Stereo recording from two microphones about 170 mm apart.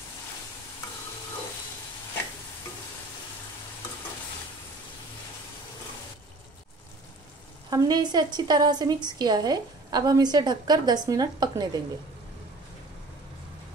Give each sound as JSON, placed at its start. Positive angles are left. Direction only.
{"t": 7.7, "sound": "a woman's voice", "side_deg": -25}